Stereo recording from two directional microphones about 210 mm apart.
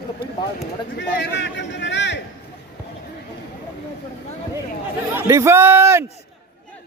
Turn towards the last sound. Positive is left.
turn(degrees=-10)  # may be behind; listen again after turning